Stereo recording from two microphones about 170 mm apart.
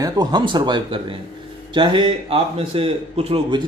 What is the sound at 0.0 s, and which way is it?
Speech, 25° right (ahead or behind).